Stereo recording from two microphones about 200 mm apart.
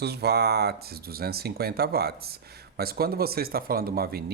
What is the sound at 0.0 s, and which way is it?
Speech, 55° right (ahead or behind).